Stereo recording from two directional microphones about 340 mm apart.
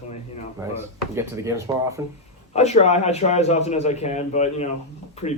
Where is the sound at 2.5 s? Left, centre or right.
Centre.